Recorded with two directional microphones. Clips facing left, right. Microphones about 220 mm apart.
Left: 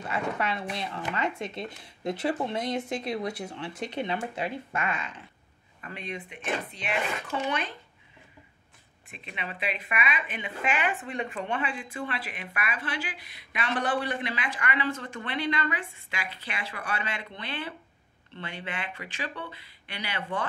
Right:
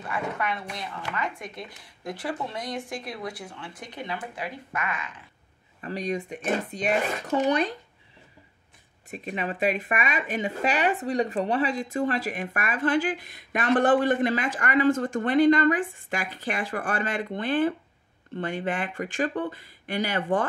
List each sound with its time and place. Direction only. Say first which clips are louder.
0.1 s speech: even; 25° left (ahead or behind)
5.8 s speech: right 9 dB; 35° right (ahead or behind)
9.1 s speech: right 9 dB; 45° right (ahead or behind)